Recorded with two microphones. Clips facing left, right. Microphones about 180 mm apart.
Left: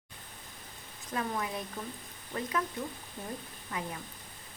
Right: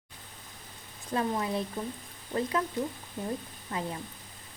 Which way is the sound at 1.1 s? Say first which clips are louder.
Right 5 dB; 30° right (ahead or behind).